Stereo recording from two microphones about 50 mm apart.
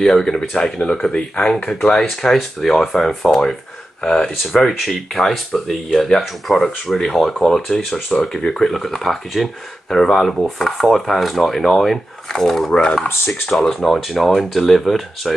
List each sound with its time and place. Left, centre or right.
0.0 s speech: centre